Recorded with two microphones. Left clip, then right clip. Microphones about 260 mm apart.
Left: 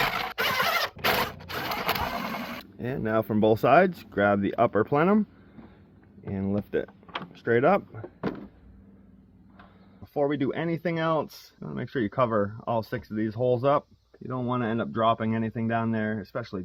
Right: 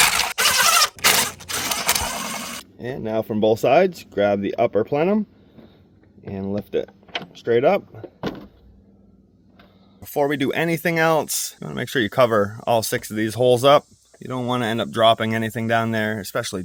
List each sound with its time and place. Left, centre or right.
0.3 s a sound: centre
2.7 s speech: left
6.3 s speech: centre
10.0 s speech: right